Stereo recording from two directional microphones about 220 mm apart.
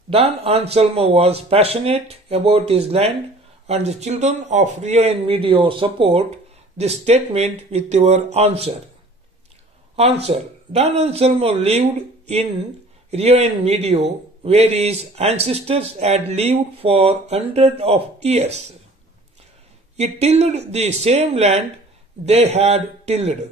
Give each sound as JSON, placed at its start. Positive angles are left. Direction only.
{"t": 0.1, "sound": "speech", "side_deg": -25}
{"t": 10.2, "sound": "speech", "side_deg": -30}
{"t": 20.0, "sound": "a man's voice", "side_deg": -30}